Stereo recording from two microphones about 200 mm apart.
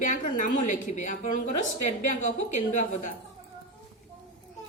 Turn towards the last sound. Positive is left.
turn(degrees=35)  # may be behind; listen again after turning